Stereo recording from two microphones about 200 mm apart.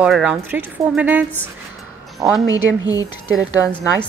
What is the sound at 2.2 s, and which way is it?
Speech, 15° right (ahead or behind).